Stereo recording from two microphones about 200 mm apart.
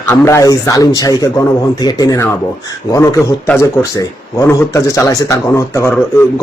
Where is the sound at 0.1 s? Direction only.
15° left (ahead or behind).